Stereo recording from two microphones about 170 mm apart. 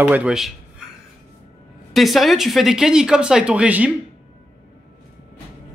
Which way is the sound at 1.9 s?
Centre (ahead or behind).